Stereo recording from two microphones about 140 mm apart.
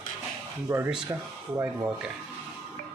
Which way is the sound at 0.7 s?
20° right (ahead or behind).